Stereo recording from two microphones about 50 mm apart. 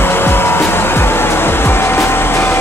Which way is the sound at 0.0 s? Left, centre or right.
Left.